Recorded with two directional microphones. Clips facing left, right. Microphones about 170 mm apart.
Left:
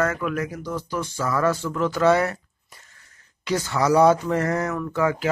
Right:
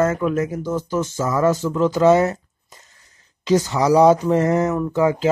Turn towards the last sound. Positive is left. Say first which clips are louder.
# right 5 dB
turn(degrees=-20)  # may be behind; listen again after turning